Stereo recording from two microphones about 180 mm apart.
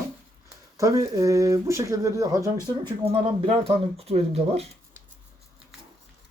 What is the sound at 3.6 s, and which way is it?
Speech, 35° right (ahead or behind).